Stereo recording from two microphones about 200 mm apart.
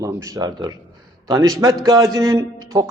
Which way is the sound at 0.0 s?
20° right (ahead or behind).